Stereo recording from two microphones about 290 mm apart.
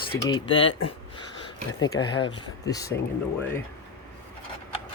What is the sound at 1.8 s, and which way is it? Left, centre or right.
Speech, centre.